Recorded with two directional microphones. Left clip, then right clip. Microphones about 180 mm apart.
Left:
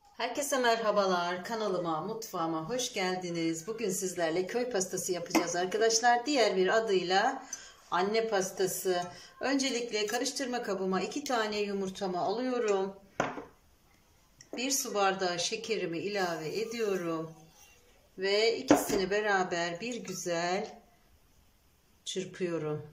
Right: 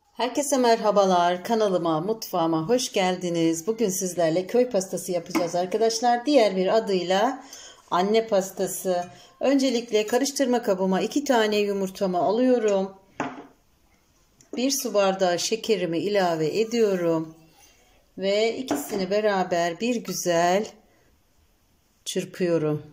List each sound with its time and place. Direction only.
0.2 s a woman's voice: 25° right (ahead or behind)
8.3 s a woman's voice: 20° right (ahead or behind)
14.5 s a woman's voice: 25° right (ahead or behind)
18.2 s a woman's voice: 25° right (ahead or behind); by 20.7 s 40° right (ahead or behind)
22.0 s a woman's voice: 40° right (ahead or behind)